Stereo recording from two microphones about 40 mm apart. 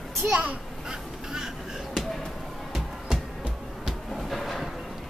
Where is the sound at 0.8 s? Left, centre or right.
Centre.